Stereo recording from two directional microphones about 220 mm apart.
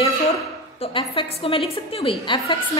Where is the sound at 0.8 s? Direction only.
25° left (ahead or behind).